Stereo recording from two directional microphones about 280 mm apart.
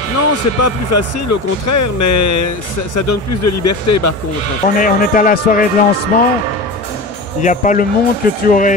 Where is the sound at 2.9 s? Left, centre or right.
Left.